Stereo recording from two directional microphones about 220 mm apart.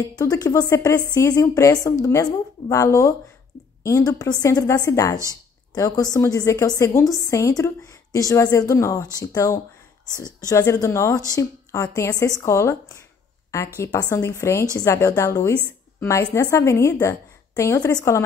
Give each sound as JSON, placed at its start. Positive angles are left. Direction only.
{"t": 0.1, "sound": "a woman's voice", "side_deg": 15}
{"t": 5.3, "sound": "a sound", "side_deg": 15}
{"t": 6.1, "sound": "a woman's voice", "side_deg": 15}